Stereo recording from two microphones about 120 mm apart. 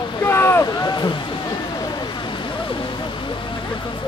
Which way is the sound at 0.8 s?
35° left (ahead or behind).